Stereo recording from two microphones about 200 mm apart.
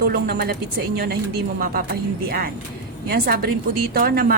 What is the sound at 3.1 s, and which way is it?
A woman's voice, 45° right (ahead or behind).